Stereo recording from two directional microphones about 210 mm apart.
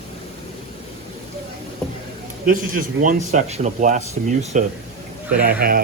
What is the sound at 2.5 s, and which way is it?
Speech, 40° right (ahead or behind).